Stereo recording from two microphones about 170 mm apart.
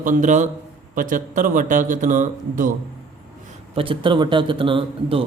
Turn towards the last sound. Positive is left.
turn(degrees=-30)  # may be behind; listen again after turning